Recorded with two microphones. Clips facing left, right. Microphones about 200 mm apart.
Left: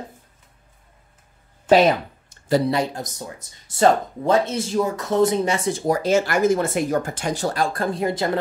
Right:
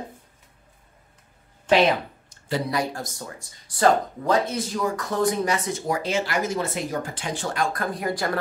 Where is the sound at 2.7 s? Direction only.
20° left (ahead or behind).